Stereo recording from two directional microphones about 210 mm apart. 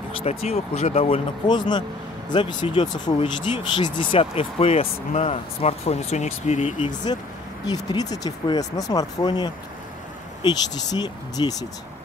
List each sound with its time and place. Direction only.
0.2 s speech: 30° left (ahead or behind)
7.6 s speech: 20° left (ahead or behind)